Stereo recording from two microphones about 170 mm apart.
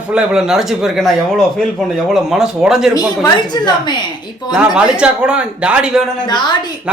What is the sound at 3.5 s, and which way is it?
Speech, 25° left (ahead or behind).